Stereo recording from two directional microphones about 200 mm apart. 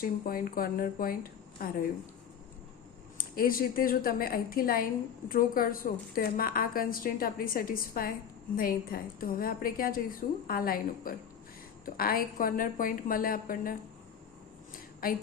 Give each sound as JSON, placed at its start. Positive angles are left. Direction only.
{"t": 0.0, "sound": "a woman's voice", "side_deg": 45}
{"t": 3.2, "sound": "a woman's voice", "side_deg": 45}
{"t": 15.0, "sound": "a woman's voice", "side_deg": 45}